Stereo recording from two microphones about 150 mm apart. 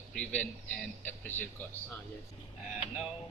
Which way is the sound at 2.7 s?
10° right (ahead or behind).